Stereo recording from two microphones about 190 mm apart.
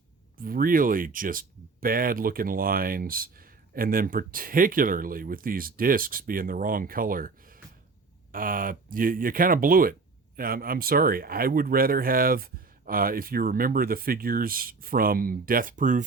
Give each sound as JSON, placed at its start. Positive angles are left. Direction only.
{"t": 0.4, "sound": "speech", "side_deg": -50}